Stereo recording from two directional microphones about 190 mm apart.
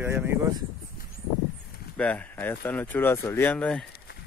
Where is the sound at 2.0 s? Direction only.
10° left (ahead or behind).